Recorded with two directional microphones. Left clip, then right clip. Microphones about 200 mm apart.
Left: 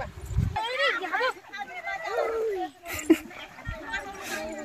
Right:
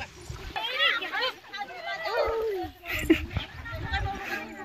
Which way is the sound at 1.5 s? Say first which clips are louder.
Even; 15° left (ahead or behind).